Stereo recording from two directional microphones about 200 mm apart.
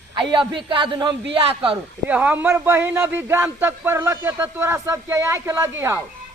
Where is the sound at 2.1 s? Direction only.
5° right (ahead or behind).